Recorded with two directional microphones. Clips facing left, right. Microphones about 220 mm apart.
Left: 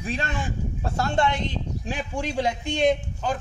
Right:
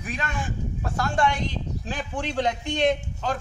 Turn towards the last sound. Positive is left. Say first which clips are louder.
# left 1 dB
turn(degrees=0)  # may be behind; listen again after turning